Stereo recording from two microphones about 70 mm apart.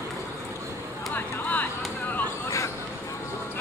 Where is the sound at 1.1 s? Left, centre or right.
Left.